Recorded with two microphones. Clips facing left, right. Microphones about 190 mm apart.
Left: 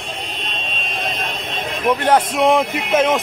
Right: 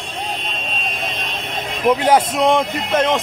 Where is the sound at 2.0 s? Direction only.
5° right (ahead or behind).